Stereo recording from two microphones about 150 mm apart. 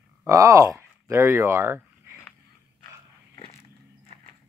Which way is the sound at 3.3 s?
40° left (ahead or behind).